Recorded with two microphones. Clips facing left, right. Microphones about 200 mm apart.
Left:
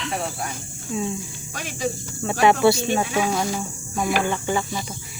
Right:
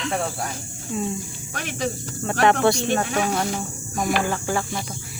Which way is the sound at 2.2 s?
5° left (ahead or behind).